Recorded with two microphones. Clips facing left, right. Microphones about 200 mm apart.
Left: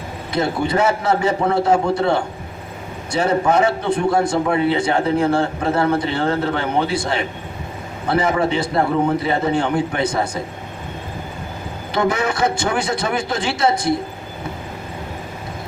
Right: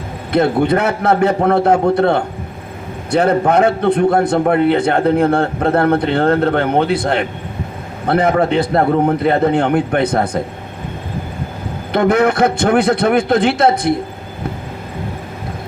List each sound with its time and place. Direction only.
0.3 s a man's voice: 60° right (ahead or behind)
11.9 s a man's voice: 60° right (ahead or behind)